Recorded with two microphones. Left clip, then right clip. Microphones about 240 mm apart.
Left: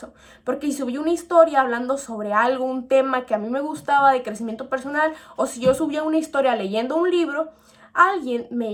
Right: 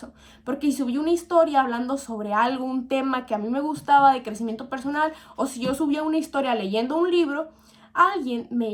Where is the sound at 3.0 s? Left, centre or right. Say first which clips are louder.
Left 5 dB; right.